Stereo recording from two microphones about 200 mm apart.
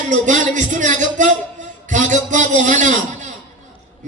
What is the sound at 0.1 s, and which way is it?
A man's voice, 40° right (ahead or behind).